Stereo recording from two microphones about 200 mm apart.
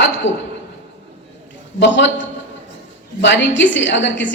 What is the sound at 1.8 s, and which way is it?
A woman's voice, 65° left (ahead or behind).